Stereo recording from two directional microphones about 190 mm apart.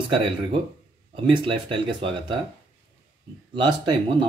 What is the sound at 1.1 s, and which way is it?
Speech, 30° right (ahead or behind).